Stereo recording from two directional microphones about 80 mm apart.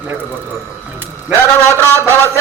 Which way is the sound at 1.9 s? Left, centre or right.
Right.